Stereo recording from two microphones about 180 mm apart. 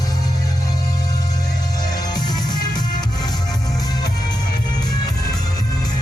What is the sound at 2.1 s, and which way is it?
Music, 25° left (ahead or behind).